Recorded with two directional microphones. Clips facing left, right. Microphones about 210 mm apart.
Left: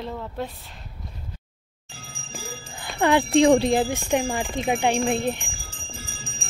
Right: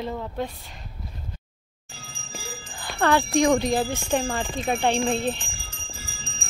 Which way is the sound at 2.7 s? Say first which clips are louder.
Left 1 dB; 20° left (ahead or behind).